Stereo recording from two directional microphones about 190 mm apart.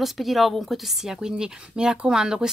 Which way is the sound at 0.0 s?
Centre (ahead or behind).